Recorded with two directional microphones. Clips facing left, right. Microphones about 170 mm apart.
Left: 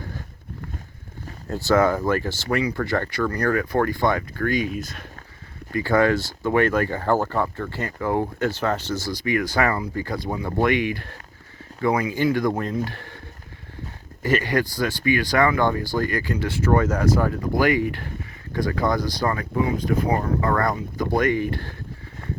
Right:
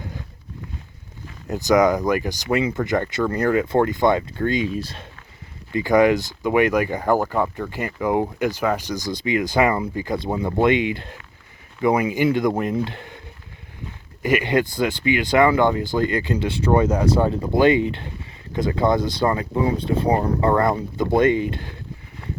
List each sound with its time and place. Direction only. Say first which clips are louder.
1.5 s speech: right 2 dB; 15° right (ahead or behind)
5.7 s speech: right 3 dB; 15° right (ahead or behind)
14.2 s speech: right 2 dB; 15° right (ahead or behind)